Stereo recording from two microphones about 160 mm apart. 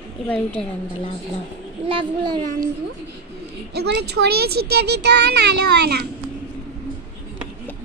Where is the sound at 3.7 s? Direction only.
90° right.